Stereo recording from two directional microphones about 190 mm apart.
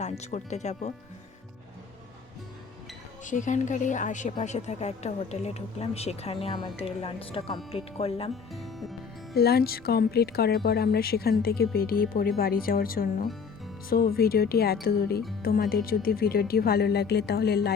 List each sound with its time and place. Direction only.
0.0 s a woman's voice: 40° left (ahead or behind)
3.2 s a woman's voice: 40° left (ahead or behind)
8.5 s music: centre (ahead or behind)
9.3 s speech: 55° left (ahead or behind)